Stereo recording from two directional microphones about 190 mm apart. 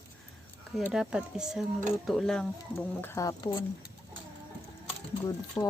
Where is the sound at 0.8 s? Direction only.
5° right (ahead or behind).